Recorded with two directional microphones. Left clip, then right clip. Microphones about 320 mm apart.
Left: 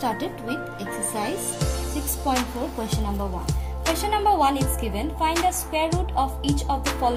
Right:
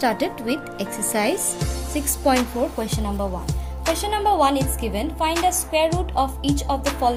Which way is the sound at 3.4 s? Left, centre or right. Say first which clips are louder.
Right 2 dB; centre.